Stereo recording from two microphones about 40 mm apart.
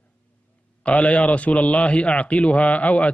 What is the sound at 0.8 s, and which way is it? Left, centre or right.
Speech, left.